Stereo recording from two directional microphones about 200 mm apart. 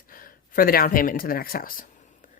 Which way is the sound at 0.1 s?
45° left (ahead or behind).